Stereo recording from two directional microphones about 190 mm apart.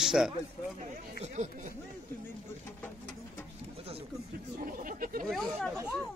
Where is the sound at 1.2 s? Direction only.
40° right (ahead or behind).